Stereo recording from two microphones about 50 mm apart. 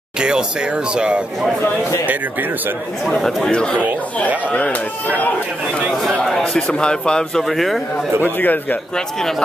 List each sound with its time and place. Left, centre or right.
0.2 s a sound: centre
0.9 s speech: centre
3.2 s speech: centre
3.5 s speech: centre
5.0 s speech: left
6.2 s speech: centre
7.4 s a man's voice: centre
8.2 s speech: left